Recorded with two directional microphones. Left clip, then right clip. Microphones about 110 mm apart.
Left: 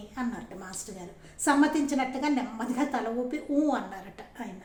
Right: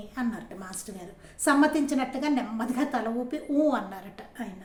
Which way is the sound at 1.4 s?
30° right (ahead or behind).